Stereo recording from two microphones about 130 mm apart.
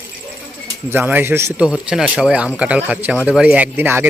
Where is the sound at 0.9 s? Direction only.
15° right (ahead or behind).